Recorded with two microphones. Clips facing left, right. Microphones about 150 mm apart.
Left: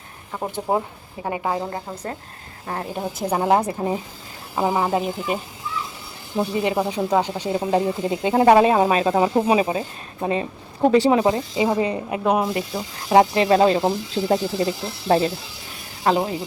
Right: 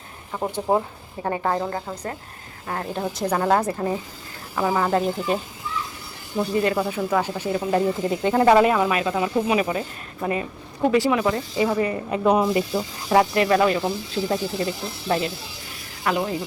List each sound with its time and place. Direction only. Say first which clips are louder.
0.7 s speech: right 1 dB; 15° left (ahead or behind)
2.9 s speech: even; 15° left (ahead or behind)
6.4 s speech: even; 15° left (ahead or behind)
8.7 s speech: left 4 dB; 30° left (ahead or behind)
12.0 s speech: right 1 dB; 5° left (ahead or behind)
13.1 s speech: left 3 dB; 20° left (ahead or behind)
15.0 s speech: left 5 dB; 40° left (ahead or behind)